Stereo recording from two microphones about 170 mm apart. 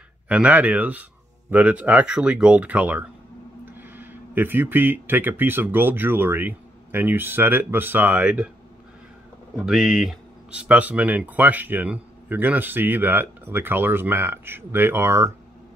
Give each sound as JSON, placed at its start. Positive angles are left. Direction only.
{"t": 0.3, "sound": "speech", "side_deg": -10}
{"t": 9.7, "sound": "speech", "side_deg": -5}